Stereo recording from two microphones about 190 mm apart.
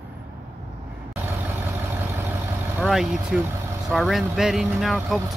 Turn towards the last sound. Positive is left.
turn(degrees=0)  # may be behind; listen again after turning